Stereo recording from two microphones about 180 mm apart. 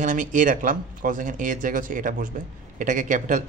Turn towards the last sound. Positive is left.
turn(degrees=-45)  # may be behind; listen again after turning